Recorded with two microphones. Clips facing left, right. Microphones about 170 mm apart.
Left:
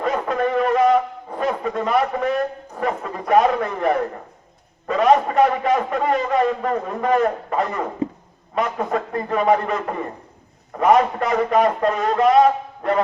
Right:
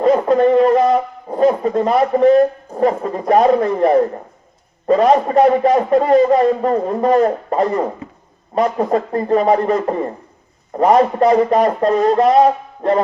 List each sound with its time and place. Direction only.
0.0 s a man's voice: 35° right (ahead or behind)